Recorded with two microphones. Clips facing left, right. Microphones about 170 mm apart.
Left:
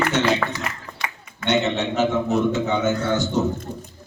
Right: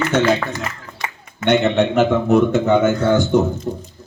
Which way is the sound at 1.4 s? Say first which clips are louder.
Right 6 dB; 55° right (ahead or behind).